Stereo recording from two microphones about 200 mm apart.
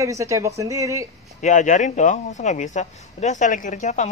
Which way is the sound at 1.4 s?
35° left (ahead or behind).